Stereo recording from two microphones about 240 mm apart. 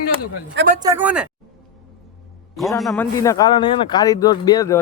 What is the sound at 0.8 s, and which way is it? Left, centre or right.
Speech, centre.